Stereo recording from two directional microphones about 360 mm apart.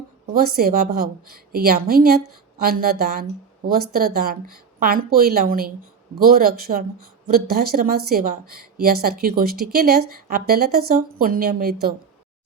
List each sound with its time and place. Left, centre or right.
0.3 s speech: right